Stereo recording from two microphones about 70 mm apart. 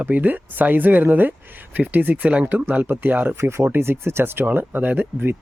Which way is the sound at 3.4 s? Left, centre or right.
Right.